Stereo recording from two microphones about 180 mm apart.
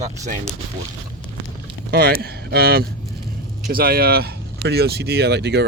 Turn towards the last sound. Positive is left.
turn(degrees=-70)  # may be behind; listen again after turning